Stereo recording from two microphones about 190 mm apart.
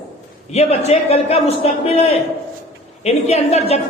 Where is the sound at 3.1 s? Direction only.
35° left (ahead or behind).